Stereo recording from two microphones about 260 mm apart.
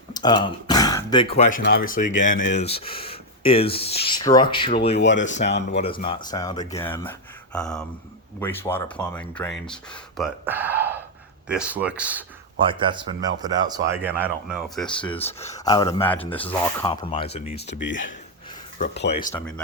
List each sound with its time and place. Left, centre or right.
0.1 s speech: centre
4.9 s speech: left
5.7 s speech: left; by 12.2 s centre
12.5 s speech: centre
14.8 s speech: centre
16.9 s speech: centre
17.7 s speech: left
19.3 s speech: centre